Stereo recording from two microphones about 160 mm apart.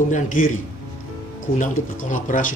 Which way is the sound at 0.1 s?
55° left (ahead or behind).